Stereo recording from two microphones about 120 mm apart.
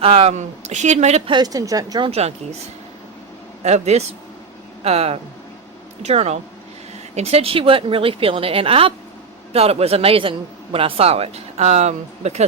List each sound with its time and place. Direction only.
0.0 s a man's voice: 55° right (ahead or behind)
1.3 s speech: 35° right (ahead or behind)
2.0 s a man's voice: 60° right (ahead or behind)
3.6 s a man's voice: 70° right (ahead or behind)